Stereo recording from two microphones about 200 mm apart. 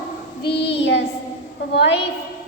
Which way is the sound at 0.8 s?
60° left (ahead or behind).